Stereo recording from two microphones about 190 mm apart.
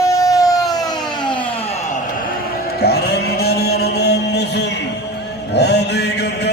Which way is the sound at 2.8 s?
55° left (ahead or behind).